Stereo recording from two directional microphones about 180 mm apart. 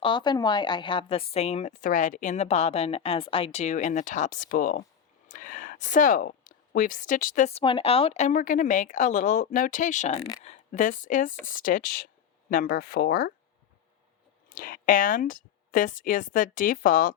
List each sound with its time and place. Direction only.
0.0 s a woman's voice: 25° left (ahead or behind); by 7.6 s 45° left (ahead or behind)
7.6 s a woman's voice: 30° left (ahead or behind); by 13.3 s 55° left (ahead or behind)
14.5 s a woman's voice: 50° left (ahead or behind)